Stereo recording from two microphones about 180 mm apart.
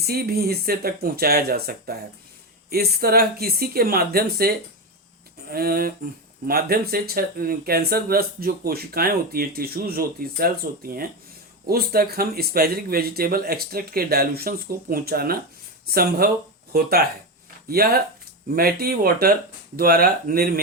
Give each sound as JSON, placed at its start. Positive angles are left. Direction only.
{"t": 0.0, "sound": "speech", "side_deg": -60}